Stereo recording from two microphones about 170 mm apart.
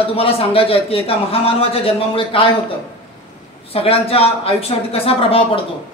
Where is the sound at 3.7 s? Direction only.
35° left (ahead or behind).